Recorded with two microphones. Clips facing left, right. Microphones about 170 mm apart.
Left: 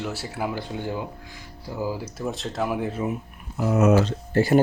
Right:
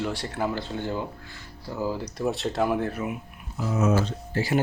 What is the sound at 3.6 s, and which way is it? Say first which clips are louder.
Speech: left 5 dB; 65° left (ahead or behind).